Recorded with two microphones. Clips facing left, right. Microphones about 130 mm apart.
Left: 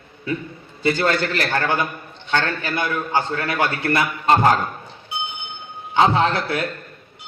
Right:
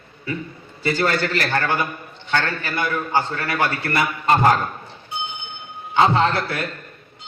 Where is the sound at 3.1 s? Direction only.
20° left (ahead or behind).